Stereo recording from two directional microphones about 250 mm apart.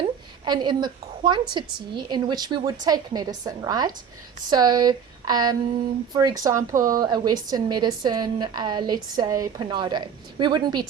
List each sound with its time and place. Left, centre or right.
0.0 s a woman's voice: centre